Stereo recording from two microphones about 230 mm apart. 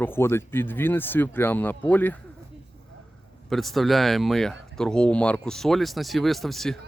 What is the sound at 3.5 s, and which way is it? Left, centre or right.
Speech, centre.